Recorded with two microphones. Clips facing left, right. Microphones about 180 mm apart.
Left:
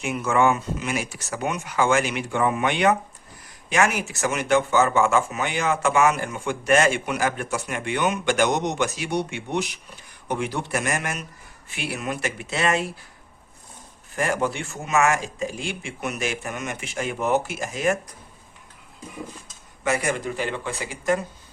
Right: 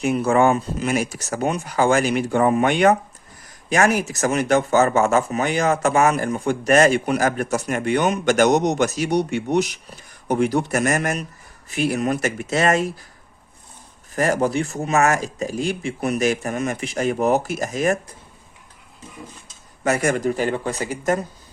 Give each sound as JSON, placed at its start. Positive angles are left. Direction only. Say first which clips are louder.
{"t": 0.0, "sound": "speech", "louder": "right 4 dB", "side_deg": -35}
{"t": 14.2, "sound": "speech", "louder": "right 5 dB", "side_deg": -40}
{"t": 19.8, "sound": "speech", "louder": "right 5 dB", "side_deg": -45}